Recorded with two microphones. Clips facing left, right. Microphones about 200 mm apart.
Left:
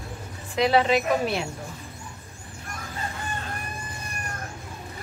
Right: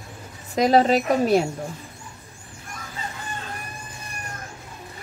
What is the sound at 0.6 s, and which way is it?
Speech, 40° right (ahead or behind).